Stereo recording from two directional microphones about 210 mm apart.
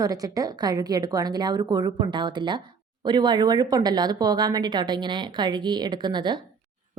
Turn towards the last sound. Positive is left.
turn(degrees=-20)  # may be behind; listen again after turning